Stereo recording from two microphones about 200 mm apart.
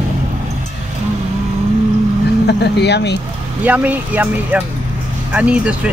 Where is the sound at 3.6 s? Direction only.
10° right (ahead or behind).